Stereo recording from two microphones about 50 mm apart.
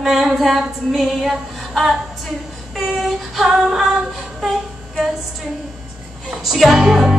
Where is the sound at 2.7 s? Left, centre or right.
Centre.